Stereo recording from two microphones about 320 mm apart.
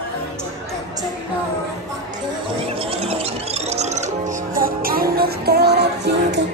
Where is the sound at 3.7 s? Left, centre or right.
Right.